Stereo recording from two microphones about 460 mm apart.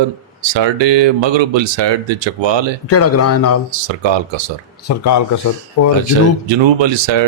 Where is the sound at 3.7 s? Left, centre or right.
Right.